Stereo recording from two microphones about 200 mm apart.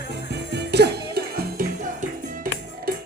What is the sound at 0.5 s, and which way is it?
Music, 55° right (ahead or behind).